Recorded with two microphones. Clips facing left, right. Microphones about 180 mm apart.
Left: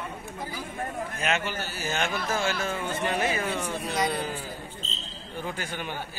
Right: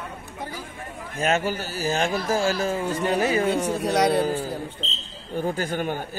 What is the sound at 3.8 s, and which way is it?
Speech, 75° right (ahead or behind).